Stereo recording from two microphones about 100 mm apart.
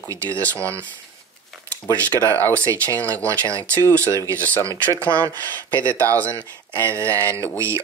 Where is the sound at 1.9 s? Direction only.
20° left (ahead or behind).